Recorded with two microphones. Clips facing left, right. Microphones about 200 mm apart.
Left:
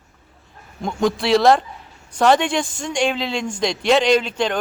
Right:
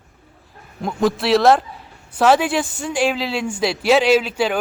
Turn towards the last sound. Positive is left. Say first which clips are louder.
# right 1 dB
turn(degrees=-5)  # may be behind; listen again after turning